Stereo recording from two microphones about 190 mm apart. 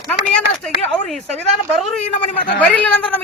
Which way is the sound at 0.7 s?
35° left (ahead or behind).